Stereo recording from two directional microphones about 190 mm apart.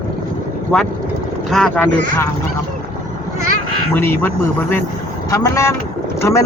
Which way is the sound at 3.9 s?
10° left (ahead or behind).